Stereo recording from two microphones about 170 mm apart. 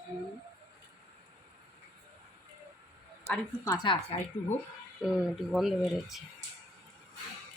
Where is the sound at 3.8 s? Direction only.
30° left (ahead or behind).